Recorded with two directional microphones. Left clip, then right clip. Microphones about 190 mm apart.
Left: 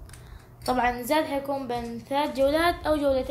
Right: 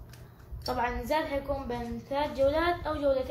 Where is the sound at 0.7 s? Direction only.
55° left (ahead or behind).